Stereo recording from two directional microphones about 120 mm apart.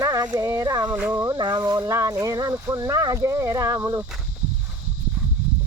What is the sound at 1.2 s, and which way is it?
Speech, 35° right (ahead or behind).